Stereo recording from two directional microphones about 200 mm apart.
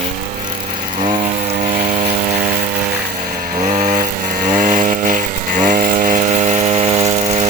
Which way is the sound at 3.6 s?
35° right (ahead or behind).